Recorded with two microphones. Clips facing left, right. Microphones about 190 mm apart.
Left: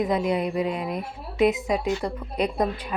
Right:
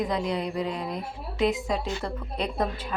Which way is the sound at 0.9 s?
Centre (ahead or behind).